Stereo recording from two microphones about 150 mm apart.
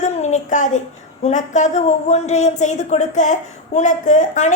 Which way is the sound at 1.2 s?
50° left (ahead or behind).